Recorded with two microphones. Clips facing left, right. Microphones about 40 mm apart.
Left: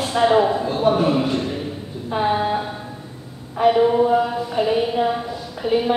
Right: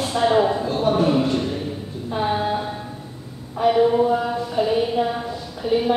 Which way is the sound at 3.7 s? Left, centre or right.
Centre.